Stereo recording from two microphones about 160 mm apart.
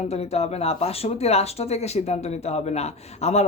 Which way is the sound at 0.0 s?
40° left (ahead or behind).